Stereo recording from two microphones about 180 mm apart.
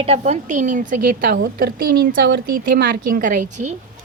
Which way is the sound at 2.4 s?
55° right (ahead or behind).